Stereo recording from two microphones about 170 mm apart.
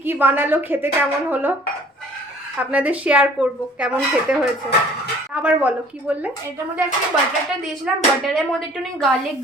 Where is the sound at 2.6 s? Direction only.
10° right (ahead or behind).